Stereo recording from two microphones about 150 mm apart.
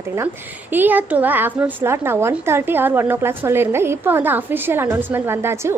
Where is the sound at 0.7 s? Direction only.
10° right (ahead or behind).